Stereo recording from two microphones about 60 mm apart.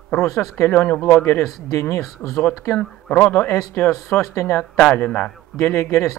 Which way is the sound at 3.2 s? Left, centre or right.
Left.